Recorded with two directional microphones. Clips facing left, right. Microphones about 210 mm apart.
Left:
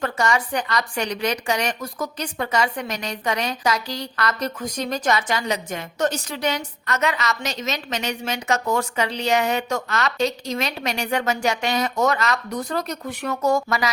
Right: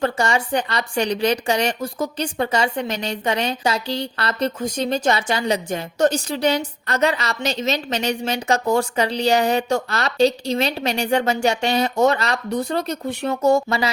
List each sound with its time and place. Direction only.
0.0 s speech: 30° right (ahead or behind)